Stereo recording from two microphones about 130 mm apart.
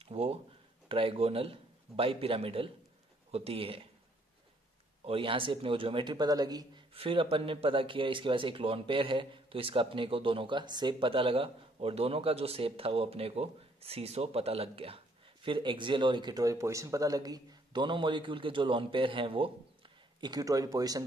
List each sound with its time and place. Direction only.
0.0 s a sound: 50° right (ahead or behind)
0.8 s a man's voice: 45° right (ahead or behind)
5.0 s speech: 45° right (ahead or behind)
6.9 s speech: 45° right (ahead or behind)
20.2 s speech: 30° right (ahead or behind)